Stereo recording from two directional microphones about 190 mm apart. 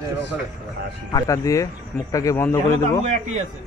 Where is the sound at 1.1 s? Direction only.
15° left (ahead or behind).